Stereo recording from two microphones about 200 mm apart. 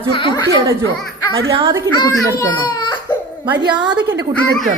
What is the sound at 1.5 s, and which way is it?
Speech, 25° right (ahead or behind).